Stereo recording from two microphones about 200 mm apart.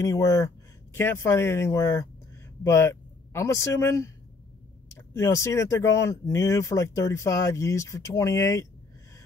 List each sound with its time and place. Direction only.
0.0 s speech: 15° left (ahead or behind)